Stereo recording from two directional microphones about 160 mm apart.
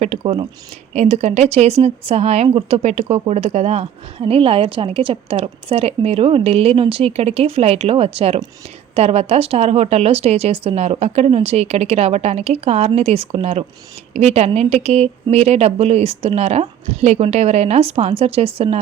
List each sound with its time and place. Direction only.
0.0 s speech: 45° right (ahead or behind)